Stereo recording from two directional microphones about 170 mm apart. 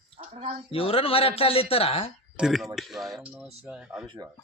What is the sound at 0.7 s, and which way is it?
A man's voice, 35° left (ahead or behind).